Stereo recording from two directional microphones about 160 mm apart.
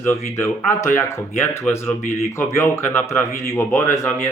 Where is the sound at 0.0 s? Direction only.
15° left (ahead or behind).